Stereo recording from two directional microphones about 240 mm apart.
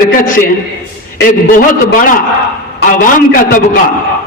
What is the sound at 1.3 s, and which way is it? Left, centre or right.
Speech, left.